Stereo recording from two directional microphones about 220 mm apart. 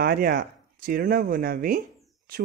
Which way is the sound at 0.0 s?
45° right (ahead or behind).